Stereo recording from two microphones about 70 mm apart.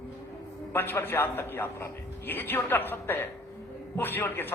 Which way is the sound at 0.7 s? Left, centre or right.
Left.